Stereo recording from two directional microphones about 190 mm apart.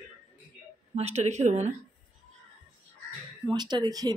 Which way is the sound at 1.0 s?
35° right (ahead or behind).